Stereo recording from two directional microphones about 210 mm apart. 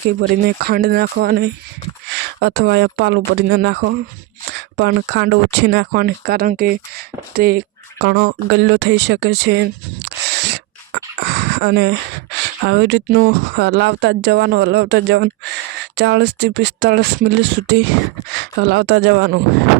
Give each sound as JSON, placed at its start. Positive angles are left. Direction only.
{"t": 0.4, "sound": "speech", "side_deg": -50}